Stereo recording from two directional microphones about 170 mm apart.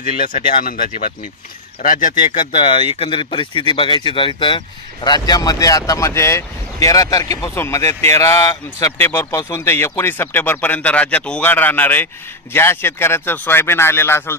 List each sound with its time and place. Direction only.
0.0 s speech: 50° left (ahead or behind)
2.4 s speech: 30° left (ahead or behind); by 14.3 s 15° left (ahead or behind)